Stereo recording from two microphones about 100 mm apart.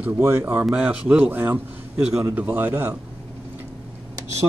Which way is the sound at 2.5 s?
20° right (ahead or behind).